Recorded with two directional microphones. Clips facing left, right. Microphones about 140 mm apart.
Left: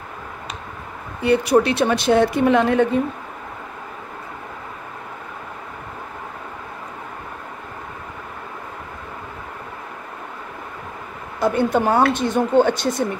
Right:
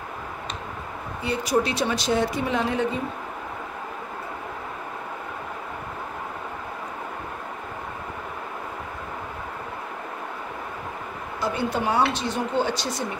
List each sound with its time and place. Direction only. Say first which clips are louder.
1.2 s a woman's voice: left 8 dB; 60° left (ahead or behind)
11.3 s speech: left 8 dB; 55° left (ahead or behind)